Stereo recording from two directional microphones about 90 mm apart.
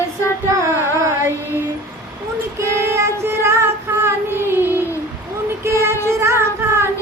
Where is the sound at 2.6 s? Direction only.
30° right (ahead or behind).